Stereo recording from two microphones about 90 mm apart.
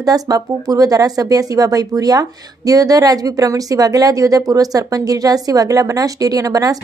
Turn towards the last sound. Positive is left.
turn(degrees=-40)  # may be behind; listen again after turning